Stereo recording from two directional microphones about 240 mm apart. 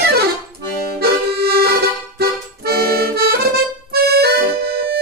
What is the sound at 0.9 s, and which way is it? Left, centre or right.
Music, right.